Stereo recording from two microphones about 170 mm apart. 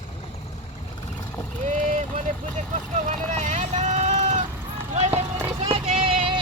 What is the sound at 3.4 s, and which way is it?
Vehicle, 45° right (ahead or behind).